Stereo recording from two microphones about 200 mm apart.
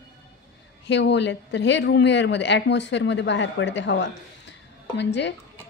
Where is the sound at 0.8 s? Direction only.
60° left (ahead or behind).